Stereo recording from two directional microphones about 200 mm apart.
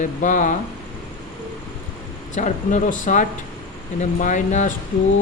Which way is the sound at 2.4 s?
35° left (ahead or behind).